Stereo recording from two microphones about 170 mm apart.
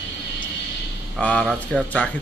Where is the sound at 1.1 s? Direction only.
5° left (ahead or behind).